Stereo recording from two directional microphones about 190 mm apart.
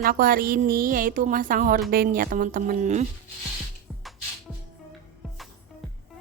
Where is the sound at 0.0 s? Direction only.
50° right (ahead or behind).